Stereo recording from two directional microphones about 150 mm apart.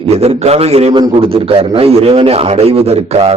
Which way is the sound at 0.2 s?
45° right (ahead or behind).